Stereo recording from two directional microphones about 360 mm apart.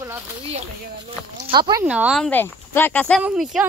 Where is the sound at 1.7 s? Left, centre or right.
Centre.